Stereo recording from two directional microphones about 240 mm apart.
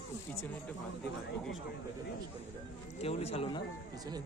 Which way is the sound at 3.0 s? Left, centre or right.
Left.